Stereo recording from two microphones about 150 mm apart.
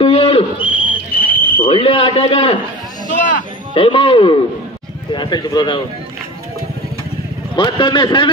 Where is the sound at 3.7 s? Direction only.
35° left (ahead or behind).